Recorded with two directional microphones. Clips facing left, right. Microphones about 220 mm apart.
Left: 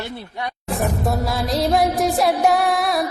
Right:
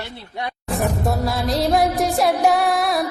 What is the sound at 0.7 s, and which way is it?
Music, centre (ahead or behind).